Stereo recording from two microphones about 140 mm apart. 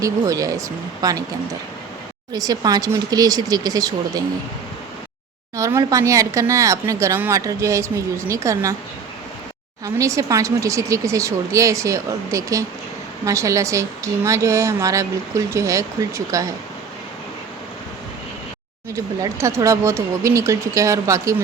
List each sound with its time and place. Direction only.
0.0 s a woman's voice: 25° right (ahead or behind)
2.3 s a woman's voice: 25° right (ahead or behind)
5.5 s a woman's voice: 20° right (ahead or behind)
9.8 s a woman's voice: 20° right (ahead or behind)
18.9 s a woman's voice: 20° right (ahead or behind)